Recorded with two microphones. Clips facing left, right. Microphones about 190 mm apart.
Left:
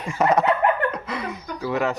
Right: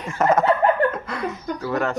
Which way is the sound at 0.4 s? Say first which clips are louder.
Right 2 dB; 35° right (ahead or behind).